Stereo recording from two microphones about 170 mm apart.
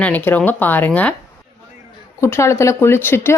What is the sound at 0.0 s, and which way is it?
Speech, 10° left (ahead or behind).